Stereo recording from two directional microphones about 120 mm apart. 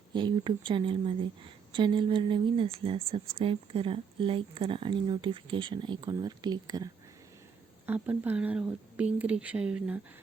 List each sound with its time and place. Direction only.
0.1 s a woman's voice: 40° right (ahead or behind)
7.9 s speech: 15° right (ahead or behind)